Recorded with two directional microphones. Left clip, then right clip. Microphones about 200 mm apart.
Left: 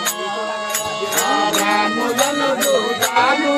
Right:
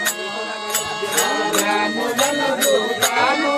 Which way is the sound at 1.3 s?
40° left (ahead or behind).